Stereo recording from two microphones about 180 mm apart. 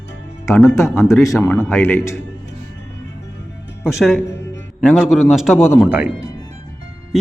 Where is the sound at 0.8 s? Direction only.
15° left (ahead or behind).